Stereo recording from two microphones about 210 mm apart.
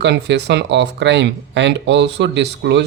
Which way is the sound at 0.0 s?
55° right (ahead or behind).